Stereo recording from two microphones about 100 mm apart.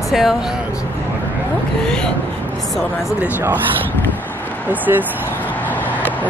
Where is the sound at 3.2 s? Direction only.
20° right (ahead or behind).